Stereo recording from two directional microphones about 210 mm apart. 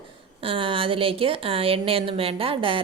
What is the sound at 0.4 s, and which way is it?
A woman's voice, 25° right (ahead or behind).